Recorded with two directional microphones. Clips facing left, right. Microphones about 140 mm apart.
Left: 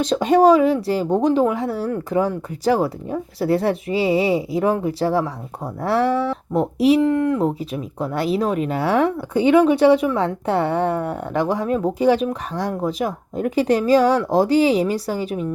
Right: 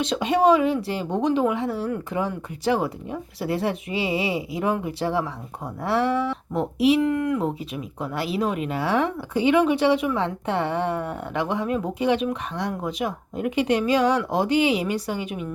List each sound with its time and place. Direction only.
0.0 s speech: 40° left (ahead or behind)